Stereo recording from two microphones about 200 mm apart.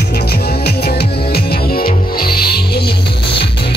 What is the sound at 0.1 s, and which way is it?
Music, 50° left (ahead or behind).